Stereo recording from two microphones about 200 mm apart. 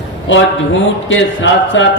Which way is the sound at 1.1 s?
65° left (ahead or behind).